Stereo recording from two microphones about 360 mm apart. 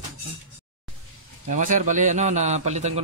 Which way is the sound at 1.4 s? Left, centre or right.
Right.